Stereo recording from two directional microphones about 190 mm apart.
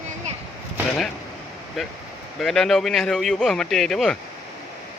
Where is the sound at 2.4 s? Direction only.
Centre (ahead or behind).